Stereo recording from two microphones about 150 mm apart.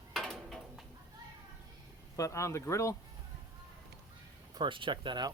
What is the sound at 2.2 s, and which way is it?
Speech, 20° left (ahead or behind).